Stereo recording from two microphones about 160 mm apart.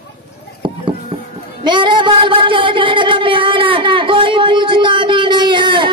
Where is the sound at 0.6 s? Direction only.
30° right (ahead or behind).